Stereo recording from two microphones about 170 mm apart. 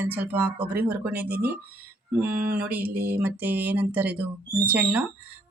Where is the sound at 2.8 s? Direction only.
60° right (ahead or behind).